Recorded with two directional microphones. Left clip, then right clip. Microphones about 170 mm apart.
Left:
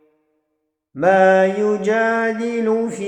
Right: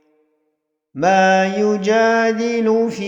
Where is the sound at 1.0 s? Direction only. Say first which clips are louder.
Left 1 dB; 35° right (ahead or behind).